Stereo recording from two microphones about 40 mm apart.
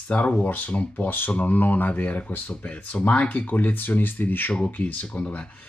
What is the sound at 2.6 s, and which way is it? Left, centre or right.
Speech, left.